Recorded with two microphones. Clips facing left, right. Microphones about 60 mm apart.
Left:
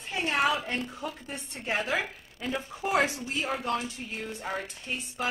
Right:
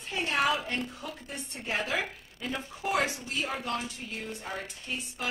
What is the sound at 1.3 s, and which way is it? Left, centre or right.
Speech, left.